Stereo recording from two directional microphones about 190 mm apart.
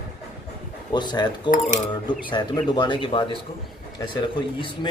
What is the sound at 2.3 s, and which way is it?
Speech, 25° left (ahead or behind).